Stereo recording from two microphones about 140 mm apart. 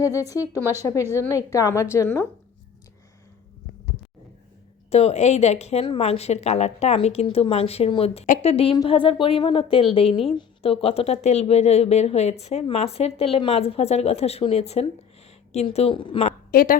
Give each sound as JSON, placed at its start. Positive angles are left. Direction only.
{"t": 0.0, "sound": "a woman's voice", "side_deg": 25}
{"t": 0.5, "sound": "speech", "side_deg": -20}
{"t": 1.1, "sound": "a woman's voice", "side_deg": 20}
{"t": 4.9, "sound": "speech", "side_deg": 50}
{"t": 16.5, "sound": "speech", "side_deg": 90}